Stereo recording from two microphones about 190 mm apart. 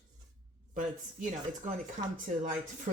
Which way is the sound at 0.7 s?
40° right (ahead or behind).